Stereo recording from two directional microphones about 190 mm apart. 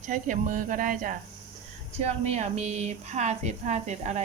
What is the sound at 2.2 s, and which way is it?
A woman's voice, 35° right (ahead or behind).